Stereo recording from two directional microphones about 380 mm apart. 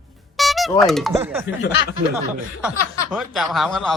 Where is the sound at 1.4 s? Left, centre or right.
Left.